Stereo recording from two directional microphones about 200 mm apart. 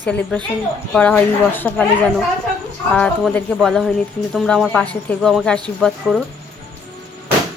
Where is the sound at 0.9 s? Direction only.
5° left (ahead or behind).